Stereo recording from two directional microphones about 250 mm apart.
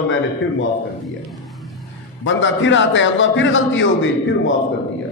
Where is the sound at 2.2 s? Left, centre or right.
Left.